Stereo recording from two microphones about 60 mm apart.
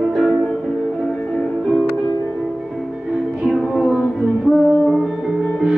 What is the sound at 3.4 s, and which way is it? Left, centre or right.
Music, centre.